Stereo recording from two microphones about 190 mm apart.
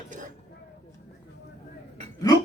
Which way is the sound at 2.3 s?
20° left (ahead or behind).